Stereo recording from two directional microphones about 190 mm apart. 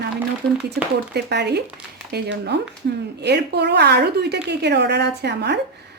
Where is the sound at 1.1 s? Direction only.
60° right (ahead or behind).